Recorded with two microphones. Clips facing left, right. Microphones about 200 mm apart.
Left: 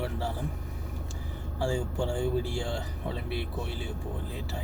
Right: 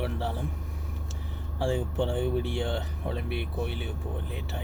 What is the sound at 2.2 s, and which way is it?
Speech, 30° left (ahead or behind).